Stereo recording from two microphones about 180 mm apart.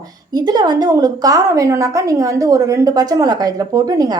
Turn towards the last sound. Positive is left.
turn(degrees=-20)  # may be behind; listen again after turning